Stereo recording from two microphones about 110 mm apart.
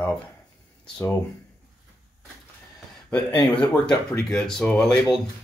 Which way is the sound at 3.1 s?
15° left (ahead or behind).